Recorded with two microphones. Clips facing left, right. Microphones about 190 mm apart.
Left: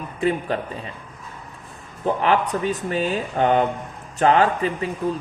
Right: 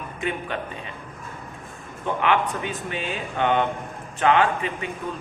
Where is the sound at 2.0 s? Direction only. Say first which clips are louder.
Left 3 dB; 35° left (ahead or behind).